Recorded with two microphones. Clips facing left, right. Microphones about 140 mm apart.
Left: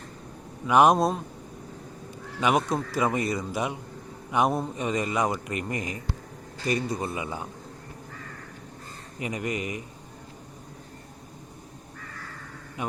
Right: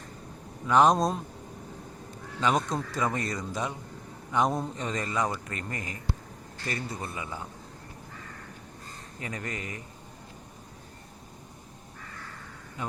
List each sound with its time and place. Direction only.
0.7 s a man's voice: 10° left (ahead or behind)
2.4 s a man's voice: 10° left (ahead or behind)
9.1 s a man's voice: 15° left (ahead or behind)
12.8 s speech: 15° left (ahead or behind)